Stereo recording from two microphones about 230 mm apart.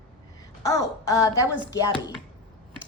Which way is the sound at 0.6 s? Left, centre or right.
Centre.